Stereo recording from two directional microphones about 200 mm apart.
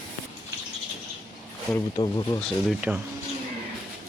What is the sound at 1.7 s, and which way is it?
Speech, 20° left (ahead or behind).